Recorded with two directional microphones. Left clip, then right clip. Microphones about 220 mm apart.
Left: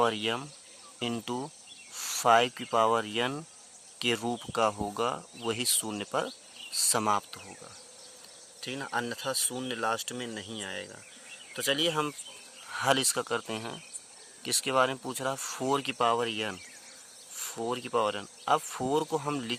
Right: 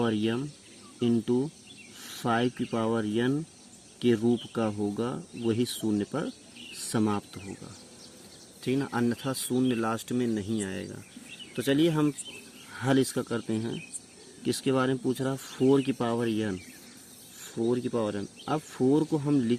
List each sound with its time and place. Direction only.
0.0 s speech: 30° left (ahead or behind)
8.6 s speech: 15° left (ahead or behind)